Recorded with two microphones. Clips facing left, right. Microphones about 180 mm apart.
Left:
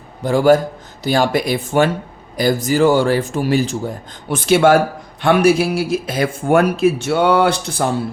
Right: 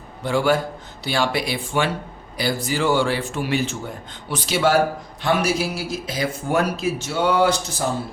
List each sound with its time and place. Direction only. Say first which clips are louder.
0.2 s a man's voice: left 7 dB; 40° left (ahead or behind); by 7.9 s 60° left (ahead or behind)